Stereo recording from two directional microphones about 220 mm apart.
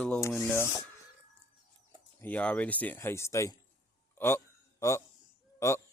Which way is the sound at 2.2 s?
5° left (ahead or behind).